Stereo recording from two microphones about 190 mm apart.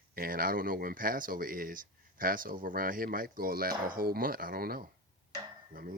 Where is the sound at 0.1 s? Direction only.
50° right (ahead or behind).